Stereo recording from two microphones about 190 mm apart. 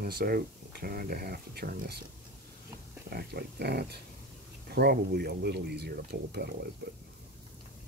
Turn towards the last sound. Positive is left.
turn(degrees=-55)  # may be behind; listen again after turning